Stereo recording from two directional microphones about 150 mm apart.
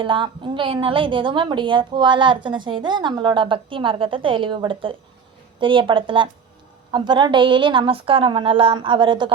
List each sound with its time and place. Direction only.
0.0 s a woman's voice: 35° right (ahead or behind)